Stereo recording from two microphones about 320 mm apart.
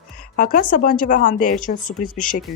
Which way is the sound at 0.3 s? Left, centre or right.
Left.